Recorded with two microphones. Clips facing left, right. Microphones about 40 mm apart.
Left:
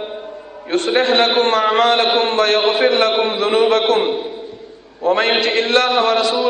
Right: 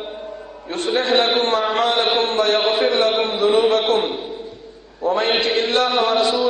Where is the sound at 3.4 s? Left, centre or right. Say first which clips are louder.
Even; left.